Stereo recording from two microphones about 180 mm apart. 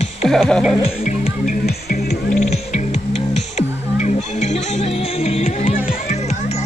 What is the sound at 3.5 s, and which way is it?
Music, 40° left (ahead or behind).